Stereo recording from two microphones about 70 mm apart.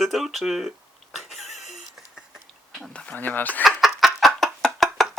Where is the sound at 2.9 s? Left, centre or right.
Centre.